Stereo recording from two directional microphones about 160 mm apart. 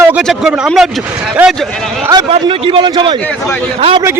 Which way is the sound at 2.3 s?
35° right (ahead or behind).